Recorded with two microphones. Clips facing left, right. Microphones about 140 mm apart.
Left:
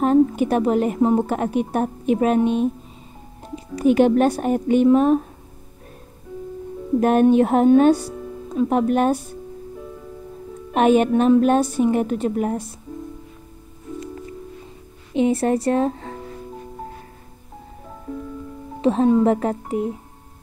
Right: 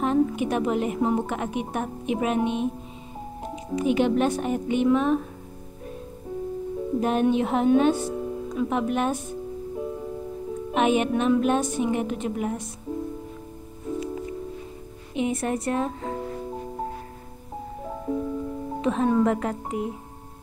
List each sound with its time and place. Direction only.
0.0 s a woman's voice: 40° left (ahead or behind)
3.7 s a woman's voice: 45° left (ahead or behind)
7.0 s speech: 55° left (ahead or behind)
10.7 s a woman's voice: 40° left (ahead or behind)
15.1 s a woman's voice: 30° left (ahead or behind)
18.0 s music: 25° right (ahead or behind)
18.8 s music: 30° left (ahead or behind)
19.0 s speech: 25° left (ahead or behind)